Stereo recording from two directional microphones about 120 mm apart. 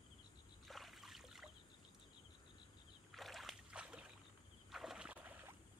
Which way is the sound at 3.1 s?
Centre (ahead or behind).